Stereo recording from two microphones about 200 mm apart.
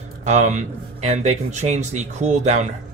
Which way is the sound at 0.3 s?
35° right (ahead or behind).